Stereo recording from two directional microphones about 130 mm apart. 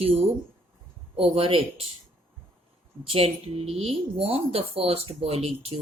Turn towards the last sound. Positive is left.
turn(degrees=-50)  # may be behind; listen again after turning